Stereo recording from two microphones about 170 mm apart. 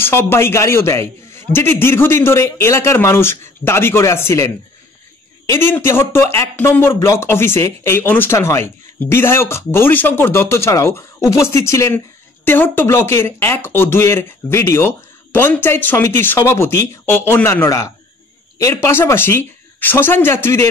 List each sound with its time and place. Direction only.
0.0 s speech: 15° left (ahead or behind)
5.5 s speech: 15° left (ahead or behind)